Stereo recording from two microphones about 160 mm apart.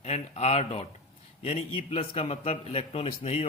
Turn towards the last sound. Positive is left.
turn(degrees=40)  # may be behind; listen again after turning